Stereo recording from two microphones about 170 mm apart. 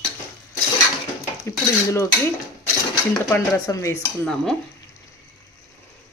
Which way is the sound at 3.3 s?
20° left (ahead or behind).